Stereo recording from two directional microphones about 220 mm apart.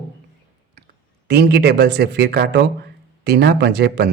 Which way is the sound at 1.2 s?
50° right (ahead or behind).